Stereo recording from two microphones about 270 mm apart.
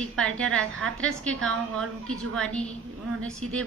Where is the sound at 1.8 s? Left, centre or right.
Right.